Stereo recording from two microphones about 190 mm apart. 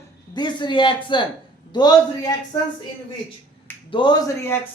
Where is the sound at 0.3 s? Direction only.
25° left (ahead or behind).